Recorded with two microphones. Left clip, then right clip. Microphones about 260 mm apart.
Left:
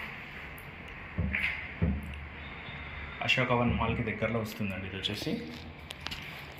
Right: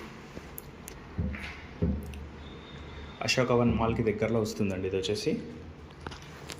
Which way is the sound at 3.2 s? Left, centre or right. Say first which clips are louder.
Right 2 dB; centre.